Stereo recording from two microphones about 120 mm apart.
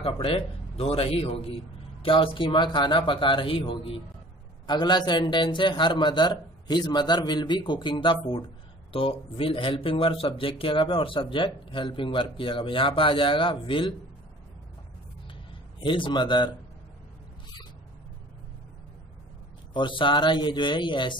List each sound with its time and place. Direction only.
0.0 s a man's voice: 50° left (ahead or behind)
15.8 s speech: 45° left (ahead or behind)
19.7 s a man's voice: 45° left (ahead or behind)